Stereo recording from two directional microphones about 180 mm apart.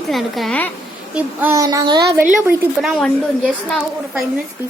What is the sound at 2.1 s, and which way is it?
A woman's voice, 10° right (ahead or behind).